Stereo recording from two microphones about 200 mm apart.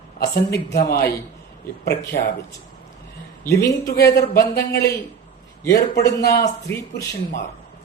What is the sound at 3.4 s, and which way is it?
Speech, 15° left (ahead or behind).